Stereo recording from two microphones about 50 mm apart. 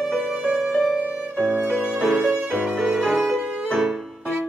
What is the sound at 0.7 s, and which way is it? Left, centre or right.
Music, centre.